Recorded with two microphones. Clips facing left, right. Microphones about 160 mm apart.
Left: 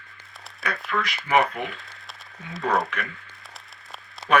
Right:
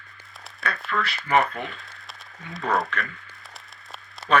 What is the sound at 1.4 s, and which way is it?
Speech, centre (ahead or behind).